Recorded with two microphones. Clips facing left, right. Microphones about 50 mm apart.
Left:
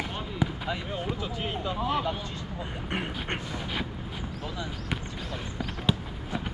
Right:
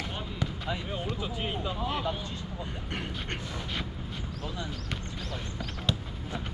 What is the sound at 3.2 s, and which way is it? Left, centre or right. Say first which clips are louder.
Speech: left 3 dB; left.